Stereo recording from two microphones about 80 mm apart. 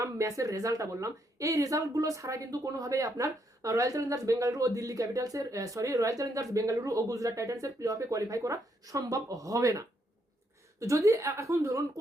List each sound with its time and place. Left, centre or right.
0.0 s a woman's voice: right